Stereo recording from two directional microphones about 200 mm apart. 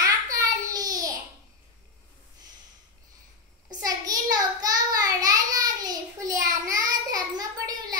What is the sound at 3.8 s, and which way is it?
Child singing, 20° right (ahead or behind).